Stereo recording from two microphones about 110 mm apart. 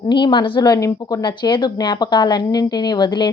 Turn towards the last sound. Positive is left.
turn(degrees=40)  # may be behind; listen again after turning